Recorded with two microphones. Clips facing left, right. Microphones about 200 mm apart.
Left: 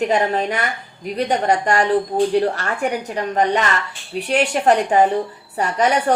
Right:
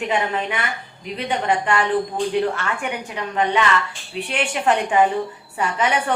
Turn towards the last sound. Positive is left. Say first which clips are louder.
# left 4 dB
turn(degrees=40)  # may be behind; listen again after turning